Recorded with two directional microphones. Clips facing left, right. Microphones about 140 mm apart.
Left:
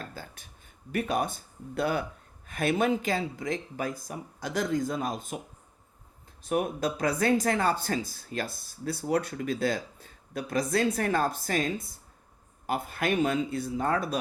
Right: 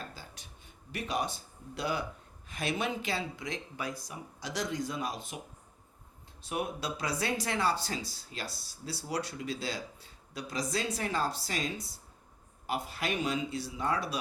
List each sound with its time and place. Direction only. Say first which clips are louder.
0.1 s a sound: left 6 dB; 50° left (ahead or behind)
0.9 s speech: left 5 dB; 50° left (ahead or behind)
6.4 s speech: left 7 dB; 50° left (ahead or behind)